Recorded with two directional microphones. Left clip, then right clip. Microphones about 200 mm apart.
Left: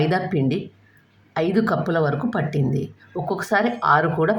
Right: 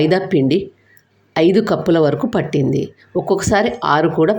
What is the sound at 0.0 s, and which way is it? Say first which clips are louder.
Speech: right 7 dB; 20° right (ahead or behind).